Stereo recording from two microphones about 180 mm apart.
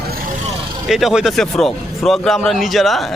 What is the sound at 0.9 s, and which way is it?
A man's voice, centre (ahead or behind).